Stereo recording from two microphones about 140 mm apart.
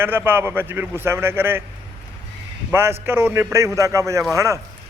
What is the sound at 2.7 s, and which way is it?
A man's voice, 15° right (ahead or behind).